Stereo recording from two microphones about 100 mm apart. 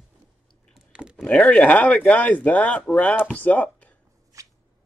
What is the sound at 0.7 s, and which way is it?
Clicking, 10° right (ahead or behind).